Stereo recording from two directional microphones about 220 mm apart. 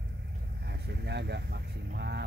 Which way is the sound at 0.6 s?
50° right (ahead or behind).